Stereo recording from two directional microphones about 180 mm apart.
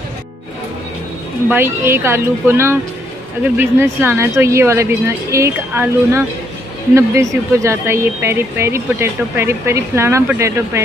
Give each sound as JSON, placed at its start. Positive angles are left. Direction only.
{"t": 1.5, "sound": "speech", "side_deg": -10}